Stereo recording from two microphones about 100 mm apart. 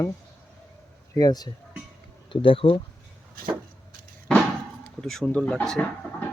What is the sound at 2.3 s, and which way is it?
Speech, 60° left (ahead or behind).